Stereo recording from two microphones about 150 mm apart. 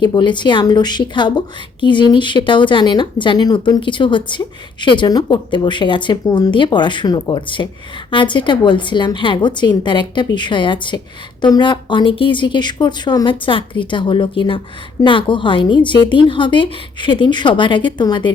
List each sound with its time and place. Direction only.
0.0 s a woman's voice: 30° left (ahead or behind)